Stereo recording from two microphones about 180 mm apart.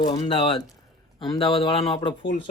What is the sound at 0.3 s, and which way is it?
A man's voice, 25° left (ahead or behind).